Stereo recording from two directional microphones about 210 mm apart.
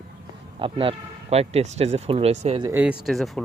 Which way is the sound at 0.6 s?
25° right (ahead or behind).